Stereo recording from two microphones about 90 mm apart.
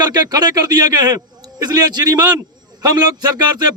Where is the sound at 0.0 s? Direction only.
50° right (ahead or behind).